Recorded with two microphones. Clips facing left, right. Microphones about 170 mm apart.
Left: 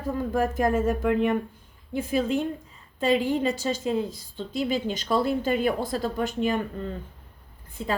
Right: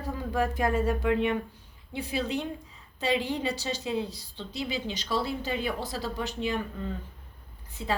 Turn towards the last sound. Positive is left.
turn(degrees=50)  # may be behind; listen again after turning